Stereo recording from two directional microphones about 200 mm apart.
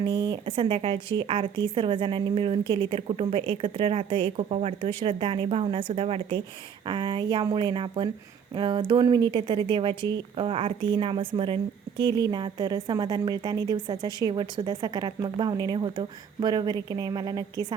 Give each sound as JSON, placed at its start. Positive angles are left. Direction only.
{"t": 0.0, "sound": "speech", "side_deg": -25}